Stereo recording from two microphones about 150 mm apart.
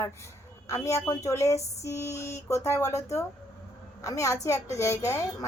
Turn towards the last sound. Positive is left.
turn(degrees=20)  # may be behind; listen again after turning